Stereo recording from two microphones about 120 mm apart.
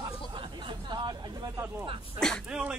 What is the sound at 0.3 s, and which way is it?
Chatter, 45° right (ahead or behind).